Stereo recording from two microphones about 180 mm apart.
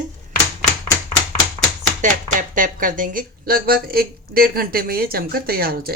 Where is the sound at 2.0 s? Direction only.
45° right (ahead or behind).